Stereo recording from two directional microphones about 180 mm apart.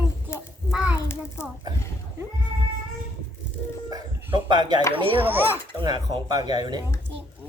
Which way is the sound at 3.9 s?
20° right (ahead or behind).